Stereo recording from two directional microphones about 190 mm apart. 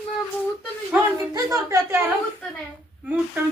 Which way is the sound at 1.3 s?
15° right (ahead or behind).